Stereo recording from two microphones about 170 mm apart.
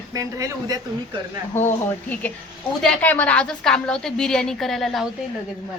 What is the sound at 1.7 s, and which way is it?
A woman's voice, 10° left (ahead or behind).